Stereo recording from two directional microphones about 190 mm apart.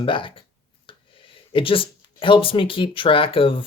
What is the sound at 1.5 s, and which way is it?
Speech, 25° left (ahead or behind).